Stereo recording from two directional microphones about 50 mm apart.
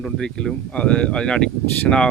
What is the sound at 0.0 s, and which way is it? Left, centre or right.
Speech, centre.